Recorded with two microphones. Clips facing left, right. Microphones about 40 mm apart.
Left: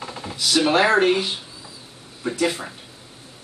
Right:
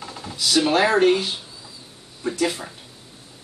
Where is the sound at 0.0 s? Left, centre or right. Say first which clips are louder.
Left 1 dB; centre.